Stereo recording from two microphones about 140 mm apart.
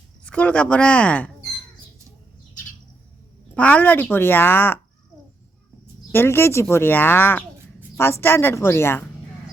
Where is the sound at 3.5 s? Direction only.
10° left (ahead or behind).